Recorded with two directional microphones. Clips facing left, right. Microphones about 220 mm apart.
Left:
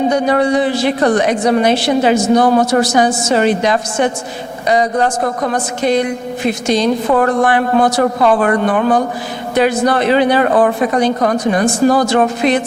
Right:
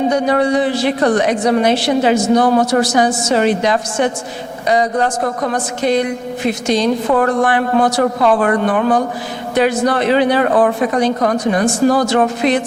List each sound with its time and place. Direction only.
0.3 s a woman's voice: 15° left (ahead or behind)
2.8 s a woman's voice: 10° left (ahead or behind)
5.4 s speech: 30° left (ahead or behind)
5.8 s a woman's voice: 15° left (ahead or behind)